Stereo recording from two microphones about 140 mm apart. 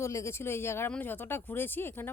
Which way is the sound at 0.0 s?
20° left (ahead or behind).